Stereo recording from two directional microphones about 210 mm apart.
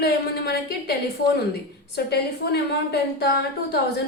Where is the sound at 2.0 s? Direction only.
50° left (ahead or behind).